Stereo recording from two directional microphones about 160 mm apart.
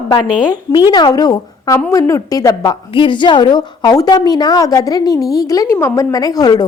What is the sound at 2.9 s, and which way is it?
A woman's voice, 30° left (ahead or behind).